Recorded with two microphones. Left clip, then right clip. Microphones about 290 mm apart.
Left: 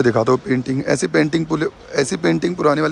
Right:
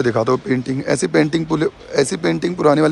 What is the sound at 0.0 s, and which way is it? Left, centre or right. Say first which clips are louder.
Speech: left 1 dB; centre.